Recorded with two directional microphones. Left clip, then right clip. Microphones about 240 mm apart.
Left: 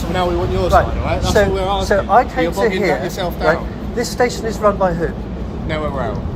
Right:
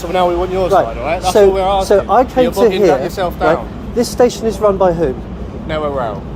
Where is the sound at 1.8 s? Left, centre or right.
Right.